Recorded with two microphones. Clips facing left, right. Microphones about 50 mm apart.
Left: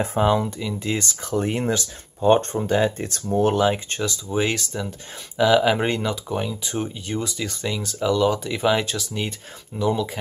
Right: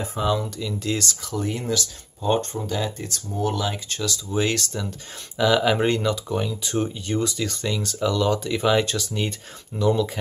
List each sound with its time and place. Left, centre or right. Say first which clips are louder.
0.0 s speech: left 5 dB; left
0.3 s speech: left 3 dB; left
1.2 s speech: left 4 dB; left
3.6 s speech: left 6 dB; left; by 10.1 s centre